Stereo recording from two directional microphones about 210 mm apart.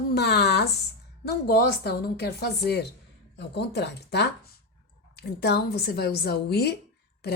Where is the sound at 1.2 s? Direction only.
50° left (ahead or behind).